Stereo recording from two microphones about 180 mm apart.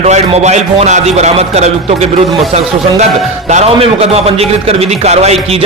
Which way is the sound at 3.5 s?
35° right (ahead or behind).